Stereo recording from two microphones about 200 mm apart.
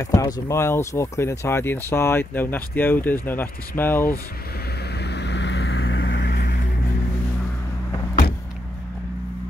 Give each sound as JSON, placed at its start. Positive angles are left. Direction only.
{"t": 0.0, "sound": "speech", "side_deg": 15}
{"t": 4.9, "sound": "vehicle", "side_deg": 55}